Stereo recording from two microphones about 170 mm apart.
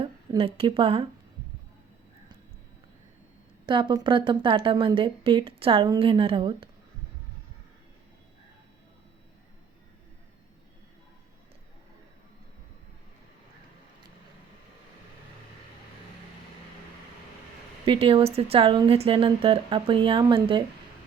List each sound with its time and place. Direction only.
0.3 s speech: 35° right (ahead or behind)
3.7 s speech: 30° right (ahead or behind)
17.8 s speech: 30° right (ahead or behind)